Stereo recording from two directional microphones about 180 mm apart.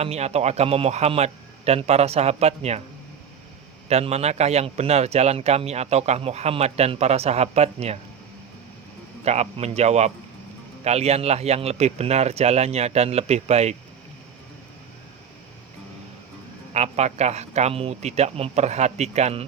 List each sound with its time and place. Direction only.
0.0 s a man's voice: 35° right (ahead or behind)
3.8 s a man's voice: 35° right (ahead or behind)
9.2 s a man's voice: 35° right (ahead or behind)
16.7 s a man's voice: 35° right (ahead or behind)